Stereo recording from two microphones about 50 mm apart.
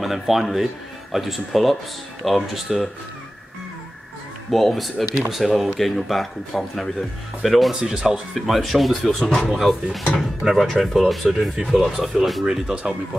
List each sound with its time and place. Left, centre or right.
0.0 s speech: centre
4.5 s speech: centre
7.7 s speech: centre
8.4 s speech: centre
12.4 s speech: centre